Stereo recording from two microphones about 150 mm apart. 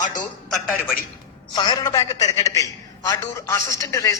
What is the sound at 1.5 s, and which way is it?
A man's voice, 30° left (ahead or behind).